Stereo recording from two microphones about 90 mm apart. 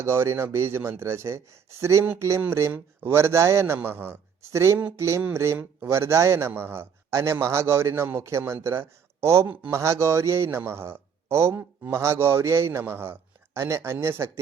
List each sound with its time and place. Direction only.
0.0 s a man's voice: 30° right (ahead or behind)